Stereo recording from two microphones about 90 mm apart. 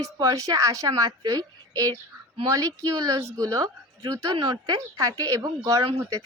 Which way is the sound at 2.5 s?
40° right (ahead or behind).